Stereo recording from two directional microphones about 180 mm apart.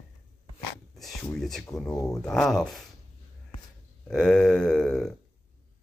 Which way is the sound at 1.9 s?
20° left (ahead or behind).